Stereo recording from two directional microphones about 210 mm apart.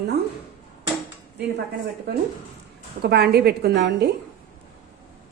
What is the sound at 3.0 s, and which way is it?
A woman's voice, 50° right (ahead or behind).